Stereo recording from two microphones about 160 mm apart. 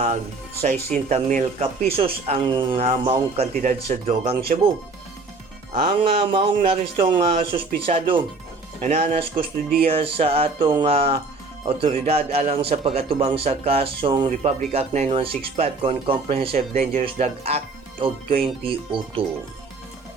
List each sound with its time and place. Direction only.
0.9 s speech: 45° right (ahead or behind)
3.5 s speech: 50° right (ahead or behind)
5.9 s speech: 35° right (ahead or behind)
8.8 s speech: 45° right (ahead or behind)
16.6 s speech: 65° right (ahead or behind)
17.1 s speech: 40° right (ahead or behind)